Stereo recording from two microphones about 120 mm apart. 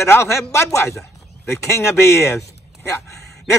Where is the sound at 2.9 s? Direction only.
25° left (ahead or behind).